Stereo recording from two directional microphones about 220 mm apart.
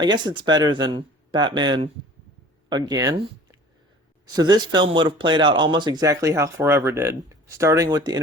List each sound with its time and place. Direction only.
0.0 s speech: 20° right (ahead or behind)